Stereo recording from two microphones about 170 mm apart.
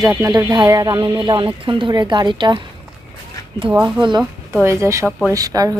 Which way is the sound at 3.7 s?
5° right (ahead or behind).